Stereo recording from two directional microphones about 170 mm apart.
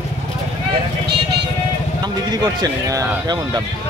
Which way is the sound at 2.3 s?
25° right (ahead or behind).